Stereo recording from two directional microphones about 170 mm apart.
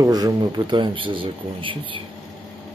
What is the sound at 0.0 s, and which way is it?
Speech, 25° right (ahead or behind).